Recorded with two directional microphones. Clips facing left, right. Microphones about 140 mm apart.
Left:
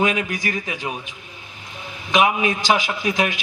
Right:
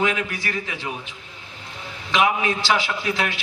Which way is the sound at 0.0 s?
15° left (ahead or behind).